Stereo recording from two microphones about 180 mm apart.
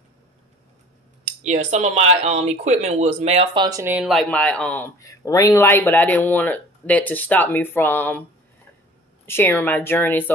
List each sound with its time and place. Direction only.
1.4 s speech: 40° right (ahead or behind)
3.6 s speech: 20° right (ahead or behind)
3.9 s speech: centre (ahead or behind)
9.2 s speech: 15° left (ahead or behind)